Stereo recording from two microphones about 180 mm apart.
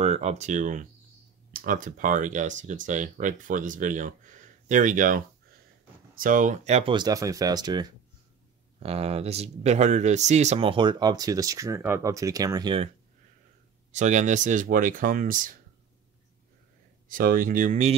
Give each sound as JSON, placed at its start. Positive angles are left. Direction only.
{"t": 0.0, "sound": "speech", "side_deg": -35}
{"t": 8.7, "sound": "speech", "side_deg": -35}
{"t": 13.9, "sound": "speech", "side_deg": -40}
{"t": 17.1, "sound": "speech", "side_deg": -50}